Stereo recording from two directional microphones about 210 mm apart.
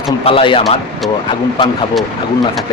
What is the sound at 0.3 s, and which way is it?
Speech, 25° left (ahead or behind).